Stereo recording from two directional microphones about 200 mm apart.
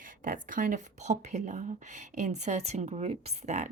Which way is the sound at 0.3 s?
40° right (ahead or behind).